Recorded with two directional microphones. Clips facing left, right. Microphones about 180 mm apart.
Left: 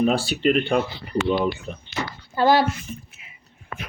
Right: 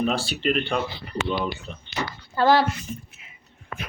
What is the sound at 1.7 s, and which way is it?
Speech, 10° left (ahead or behind).